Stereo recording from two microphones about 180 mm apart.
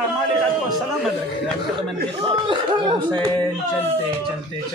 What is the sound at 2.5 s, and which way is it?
Speech, 25° right (ahead or behind).